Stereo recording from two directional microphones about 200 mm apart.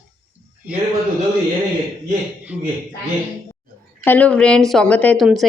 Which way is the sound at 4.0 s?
10° left (ahead or behind).